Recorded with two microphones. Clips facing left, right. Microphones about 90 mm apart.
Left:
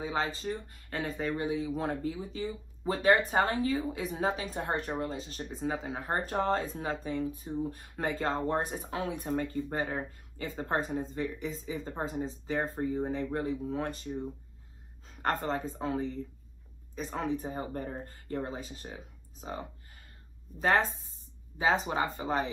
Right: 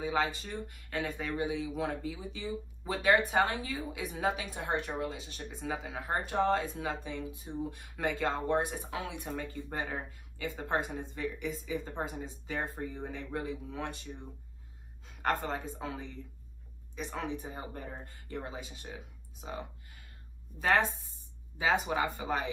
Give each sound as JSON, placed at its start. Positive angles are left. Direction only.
{"t": 0.0, "sound": "a woman's voice", "side_deg": 35}
{"t": 21.8, "sound": "a woman's voice", "side_deg": 35}